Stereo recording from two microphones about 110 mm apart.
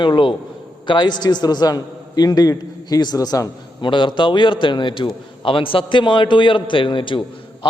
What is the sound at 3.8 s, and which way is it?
A man's voice, 50° left (ahead or behind).